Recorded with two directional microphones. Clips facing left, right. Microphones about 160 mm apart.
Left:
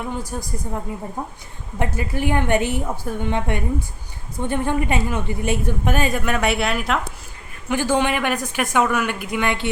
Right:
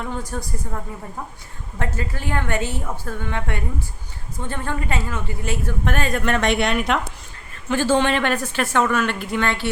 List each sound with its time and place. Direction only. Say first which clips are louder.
0.0 s a woman's voice: left 1 dB; 10° left (ahead or behind)
1.8 s a woman's voice: left 5 dB; 15° left (ahead or behind)
7.7 s a woman's voice: right 1 dB; 15° left (ahead or behind)